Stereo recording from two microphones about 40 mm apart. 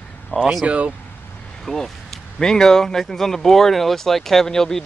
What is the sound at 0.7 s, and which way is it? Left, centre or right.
Speech, right.